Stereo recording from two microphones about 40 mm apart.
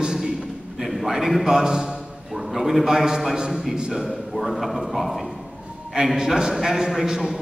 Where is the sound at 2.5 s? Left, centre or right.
Centre.